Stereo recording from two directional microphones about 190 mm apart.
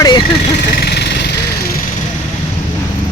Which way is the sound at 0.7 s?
60° left (ahead or behind).